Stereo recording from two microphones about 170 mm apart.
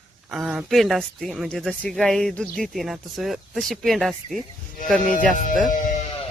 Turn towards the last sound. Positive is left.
turn(degrees=50)  # may be behind; listen again after turning